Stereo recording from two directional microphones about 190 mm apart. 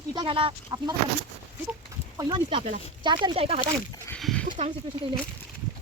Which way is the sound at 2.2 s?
25° right (ahead or behind).